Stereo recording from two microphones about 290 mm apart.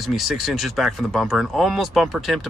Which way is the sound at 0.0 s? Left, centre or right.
Centre.